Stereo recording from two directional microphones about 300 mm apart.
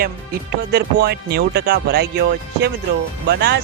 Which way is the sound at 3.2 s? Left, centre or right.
Right.